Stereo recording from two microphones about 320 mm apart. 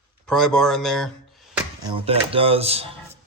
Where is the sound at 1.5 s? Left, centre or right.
Centre.